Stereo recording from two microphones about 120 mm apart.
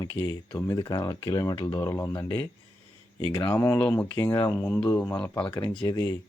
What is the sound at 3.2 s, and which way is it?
Speech, 40° left (ahead or behind).